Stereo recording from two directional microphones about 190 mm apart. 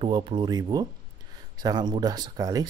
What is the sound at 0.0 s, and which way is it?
Speech, 25° right (ahead or behind).